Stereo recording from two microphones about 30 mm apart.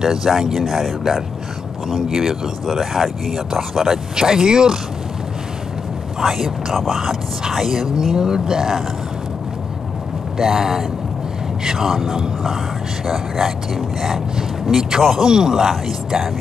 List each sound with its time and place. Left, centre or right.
0.0 s speech: centre
4.2 s speech: right
6.1 s speech: centre
8.0 s speech: right
10.3 s speech: centre